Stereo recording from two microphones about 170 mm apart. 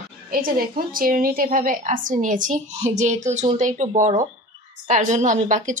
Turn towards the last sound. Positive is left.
turn(degrees=-50)  # may be behind; listen again after turning